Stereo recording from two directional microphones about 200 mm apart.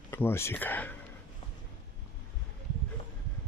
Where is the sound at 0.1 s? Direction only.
10° left (ahead or behind).